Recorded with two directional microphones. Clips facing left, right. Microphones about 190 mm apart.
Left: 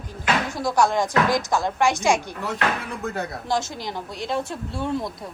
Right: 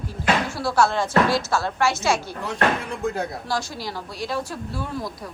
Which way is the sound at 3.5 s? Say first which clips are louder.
Left 2 dB; 20° left (ahead or behind).